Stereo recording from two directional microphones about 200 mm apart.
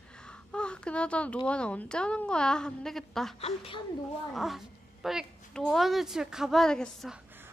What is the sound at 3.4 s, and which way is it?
Speech, 30° left (ahead or behind).